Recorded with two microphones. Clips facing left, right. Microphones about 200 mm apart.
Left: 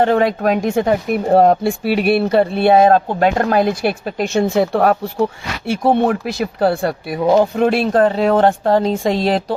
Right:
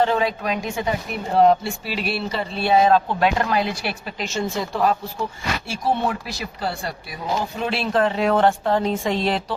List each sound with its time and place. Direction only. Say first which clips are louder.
0.0 s speech: left 6 dB; 55° left (ahead or behind); by 9.6 s 35° left (ahead or behind)